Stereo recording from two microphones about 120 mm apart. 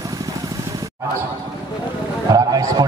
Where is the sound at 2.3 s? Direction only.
30° right (ahead or behind).